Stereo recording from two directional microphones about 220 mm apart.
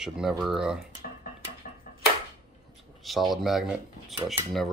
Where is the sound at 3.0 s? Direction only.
Centre (ahead or behind).